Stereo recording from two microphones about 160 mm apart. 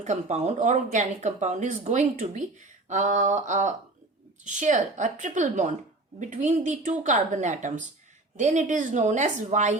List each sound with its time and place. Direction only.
0.0 s speech: 45° right (ahead or behind)